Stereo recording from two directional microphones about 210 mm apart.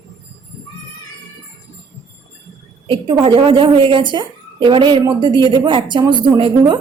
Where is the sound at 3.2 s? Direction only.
25° right (ahead or behind).